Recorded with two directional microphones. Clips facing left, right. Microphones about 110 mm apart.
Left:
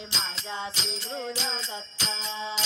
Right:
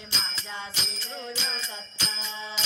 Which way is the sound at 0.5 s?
20° left (ahead or behind).